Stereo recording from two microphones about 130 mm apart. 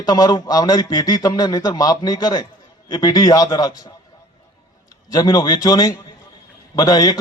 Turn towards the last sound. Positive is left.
turn(degrees=30)  # may be behind; listen again after turning